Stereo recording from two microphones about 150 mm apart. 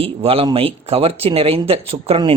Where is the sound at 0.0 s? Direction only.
40° right (ahead or behind).